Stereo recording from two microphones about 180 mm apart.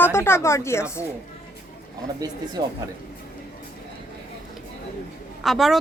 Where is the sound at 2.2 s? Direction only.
20° right (ahead or behind).